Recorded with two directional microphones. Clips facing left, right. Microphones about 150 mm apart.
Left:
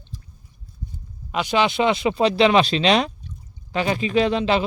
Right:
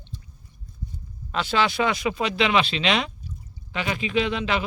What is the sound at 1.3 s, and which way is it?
Speech, 15° left (ahead or behind).